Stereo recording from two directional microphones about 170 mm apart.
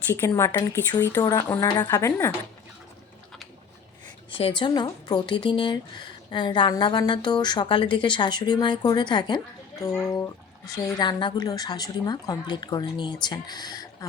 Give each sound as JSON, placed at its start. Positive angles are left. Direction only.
{"t": 0.1, "sound": "speech", "side_deg": 15}
{"t": 4.3, "sound": "speech", "side_deg": 30}